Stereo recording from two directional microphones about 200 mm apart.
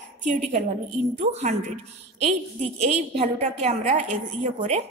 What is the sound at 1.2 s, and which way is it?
Speech, 35° right (ahead or behind).